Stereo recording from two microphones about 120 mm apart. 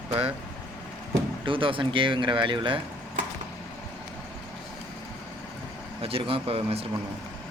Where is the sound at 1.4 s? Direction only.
45° right (ahead or behind).